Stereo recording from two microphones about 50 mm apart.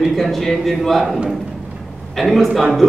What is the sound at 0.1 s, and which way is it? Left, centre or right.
Speech, centre.